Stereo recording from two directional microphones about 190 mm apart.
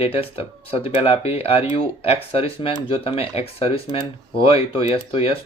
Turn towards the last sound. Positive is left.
turn(degrees=30)  # may be behind; listen again after turning